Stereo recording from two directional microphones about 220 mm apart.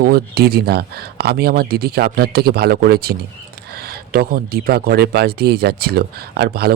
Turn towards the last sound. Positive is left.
turn(degrees=-45)  # may be behind; listen again after turning